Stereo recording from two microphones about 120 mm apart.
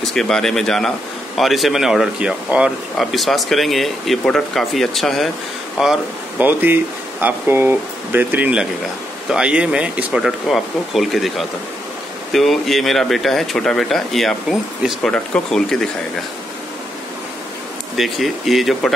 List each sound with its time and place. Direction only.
0.0 s speech: 5° left (ahead or behind)
6.4 s speech: 15° right (ahead or behind); by 15.9 s 5° left (ahead or behind)
17.9 s speech: centre (ahead or behind)